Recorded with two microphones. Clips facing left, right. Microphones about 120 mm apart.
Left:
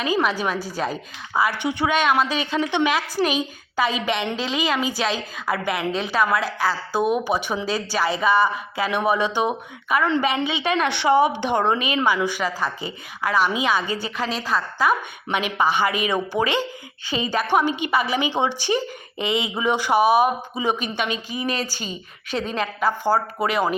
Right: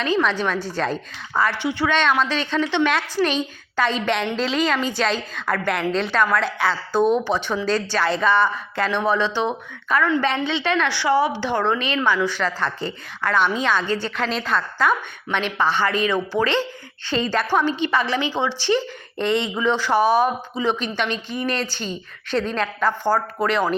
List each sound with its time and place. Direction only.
0.0 s a woman's voice: 10° left (ahead or behind)